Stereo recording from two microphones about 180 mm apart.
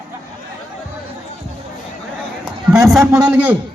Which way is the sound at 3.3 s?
10° right (ahead or behind).